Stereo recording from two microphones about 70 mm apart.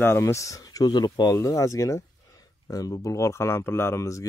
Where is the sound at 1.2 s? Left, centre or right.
Left.